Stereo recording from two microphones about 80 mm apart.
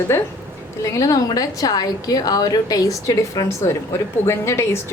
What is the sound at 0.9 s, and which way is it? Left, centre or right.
A woman's voice, left.